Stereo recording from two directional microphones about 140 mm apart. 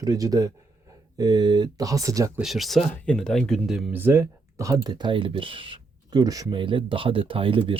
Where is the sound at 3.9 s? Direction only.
15° right (ahead or behind).